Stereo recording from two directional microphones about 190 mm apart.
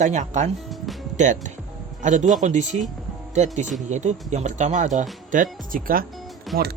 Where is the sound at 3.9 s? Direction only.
40° right (ahead or behind).